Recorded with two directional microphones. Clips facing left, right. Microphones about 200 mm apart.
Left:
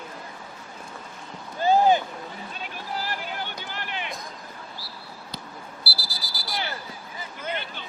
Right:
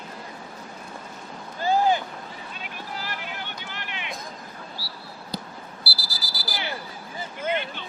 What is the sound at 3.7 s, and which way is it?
Run, 35° left (ahead or behind).